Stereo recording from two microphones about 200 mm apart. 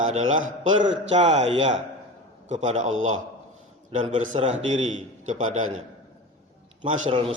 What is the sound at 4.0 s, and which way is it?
Speech, 35° right (ahead or behind).